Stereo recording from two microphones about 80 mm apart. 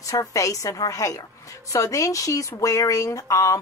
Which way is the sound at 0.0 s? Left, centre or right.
Left.